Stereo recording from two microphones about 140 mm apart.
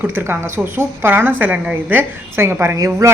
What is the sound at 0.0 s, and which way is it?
A woman's voice, 15° right (ahead or behind).